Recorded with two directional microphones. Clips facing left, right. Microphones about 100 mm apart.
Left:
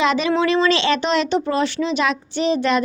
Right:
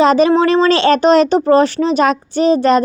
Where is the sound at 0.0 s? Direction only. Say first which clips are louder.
Right 8 dB; 40° right (ahead or behind).